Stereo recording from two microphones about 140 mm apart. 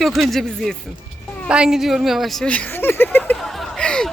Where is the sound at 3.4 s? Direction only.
Centre (ahead or behind).